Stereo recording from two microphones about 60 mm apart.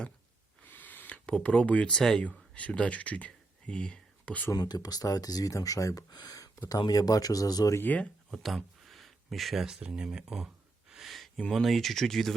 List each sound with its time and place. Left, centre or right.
0.6 s a sound: left; by 2.2 s centre
2.6 s speech: left
4.6 s speech: left
7.8 s speech: left
8.3 s a sound: centre
11.5 s speech: centre